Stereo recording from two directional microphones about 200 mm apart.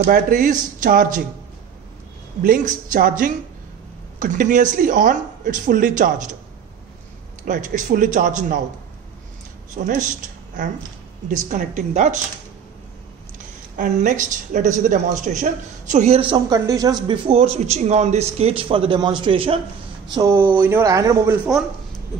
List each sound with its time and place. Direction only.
0.0 s speech: 45° right (ahead or behind)
2.4 s a woman's voice: 40° right (ahead or behind)
7.4 s a woman's voice: 40° right (ahead or behind)
9.8 s a woman's voice: 40° right (ahead or behind)
11.2 s a woman's voice: 40° right (ahead or behind)
13.7 s a woman's voice: 40° right (ahead or behind)
20.1 s speech: 15° right (ahead or behind)